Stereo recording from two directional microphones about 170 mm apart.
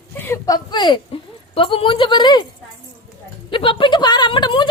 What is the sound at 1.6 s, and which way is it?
Speech, 30° left (ahead or behind).